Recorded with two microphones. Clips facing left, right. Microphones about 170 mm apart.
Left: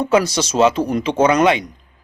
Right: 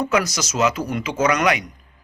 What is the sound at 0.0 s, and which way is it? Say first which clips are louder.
A man's voice: left 5 dB; 30° left (ahead or behind).